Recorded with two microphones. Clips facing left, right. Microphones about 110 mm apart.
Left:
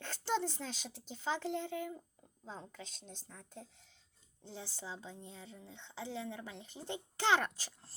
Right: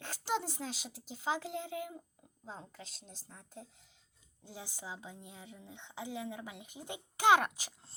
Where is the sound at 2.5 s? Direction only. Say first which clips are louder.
Even; 40° right (ahead or behind).